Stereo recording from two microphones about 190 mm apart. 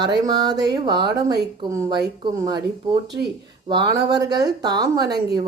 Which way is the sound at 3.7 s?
20° right (ahead or behind).